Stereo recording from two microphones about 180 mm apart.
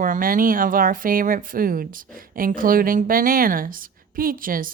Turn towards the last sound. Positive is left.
turn(degrees=-50)  # may be behind; listen again after turning